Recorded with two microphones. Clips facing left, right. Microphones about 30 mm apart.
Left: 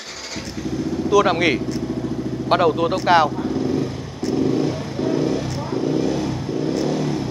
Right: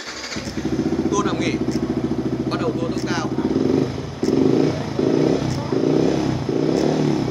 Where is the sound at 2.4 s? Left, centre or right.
Left.